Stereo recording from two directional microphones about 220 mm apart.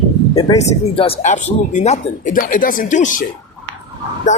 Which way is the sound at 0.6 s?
25° left (ahead or behind).